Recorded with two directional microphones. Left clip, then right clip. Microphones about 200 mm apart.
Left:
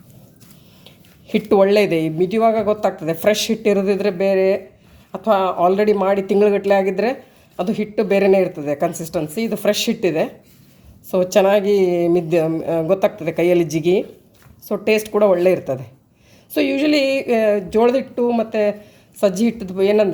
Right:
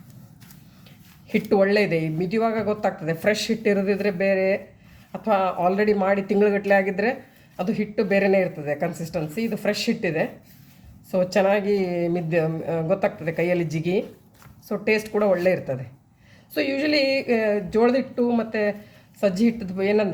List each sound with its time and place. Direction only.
1.3 s speech: 30° left (ahead or behind)